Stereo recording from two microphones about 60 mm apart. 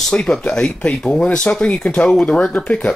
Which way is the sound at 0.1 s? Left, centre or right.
Centre.